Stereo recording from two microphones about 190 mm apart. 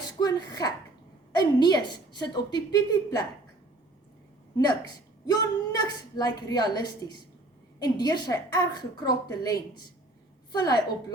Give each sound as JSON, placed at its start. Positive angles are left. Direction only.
{"t": 0.0, "sound": "a woman's voice", "side_deg": 20}
{"t": 4.5, "sound": "a woman's voice", "side_deg": 20}